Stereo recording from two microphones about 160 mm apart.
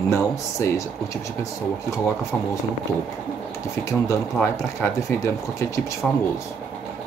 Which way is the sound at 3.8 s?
20° left (ahead or behind).